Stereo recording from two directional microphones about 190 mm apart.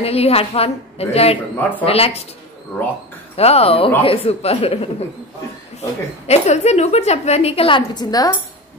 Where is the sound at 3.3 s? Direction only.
35° left (ahead or behind).